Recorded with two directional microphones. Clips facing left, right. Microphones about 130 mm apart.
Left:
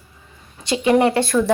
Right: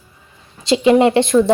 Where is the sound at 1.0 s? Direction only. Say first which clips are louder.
Right 5 dB; 20° right (ahead or behind).